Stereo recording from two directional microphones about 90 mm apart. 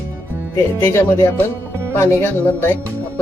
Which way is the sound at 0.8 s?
30° left (ahead or behind).